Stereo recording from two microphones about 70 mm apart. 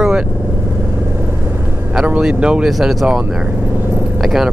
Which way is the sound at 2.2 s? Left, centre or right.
Centre.